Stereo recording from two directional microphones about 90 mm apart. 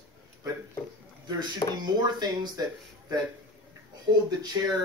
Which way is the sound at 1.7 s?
50° right (ahead or behind).